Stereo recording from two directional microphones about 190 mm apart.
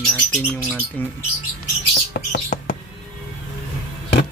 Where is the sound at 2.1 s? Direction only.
55° left (ahead or behind).